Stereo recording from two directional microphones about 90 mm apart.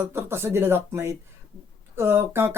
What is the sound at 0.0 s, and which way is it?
Speech, 30° right (ahead or behind).